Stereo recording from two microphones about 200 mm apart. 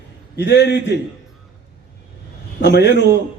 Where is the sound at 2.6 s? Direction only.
55° left (ahead or behind).